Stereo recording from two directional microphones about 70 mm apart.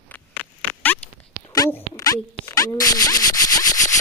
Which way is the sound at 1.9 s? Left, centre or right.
Left.